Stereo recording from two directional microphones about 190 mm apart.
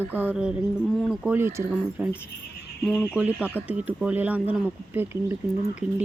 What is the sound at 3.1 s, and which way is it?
Speech, 10° right (ahead or behind).